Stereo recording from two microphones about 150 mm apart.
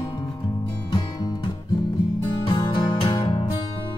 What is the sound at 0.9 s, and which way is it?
Music, 30° left (ahead or behind).